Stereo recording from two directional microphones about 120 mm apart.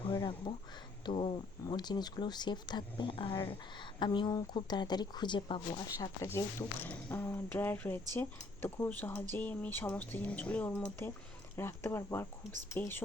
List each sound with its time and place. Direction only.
0.1 s a sound: 40° left (ahead or behind)
1.0 s speech: 50° left (ahead or behind)
1.6 s speech: 35° left (ahead or behind)
6.2 s speech: 20° left (ahead or behind)